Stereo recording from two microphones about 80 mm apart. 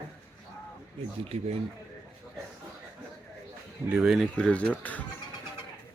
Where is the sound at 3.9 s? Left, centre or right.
Centre.